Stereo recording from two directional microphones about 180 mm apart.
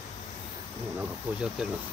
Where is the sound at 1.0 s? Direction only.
5° right (ahead or behind).